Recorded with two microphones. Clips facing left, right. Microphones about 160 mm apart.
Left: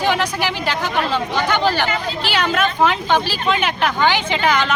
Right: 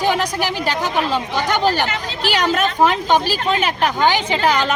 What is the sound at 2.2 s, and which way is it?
A woman's voice, 40° right (ahead or behind).